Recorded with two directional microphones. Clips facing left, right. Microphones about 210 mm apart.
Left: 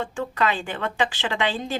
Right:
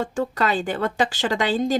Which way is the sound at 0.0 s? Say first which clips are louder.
Right 2 dB; 40° right (ahead or behind).